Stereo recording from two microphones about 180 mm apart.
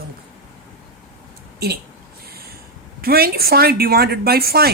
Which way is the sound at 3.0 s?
55° right (ahead or behind).